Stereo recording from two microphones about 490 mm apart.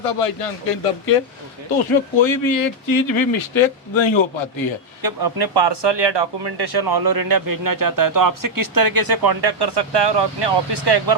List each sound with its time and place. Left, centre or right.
0.0 s speech: left
1.9 s speech: left
5.0 s speech: right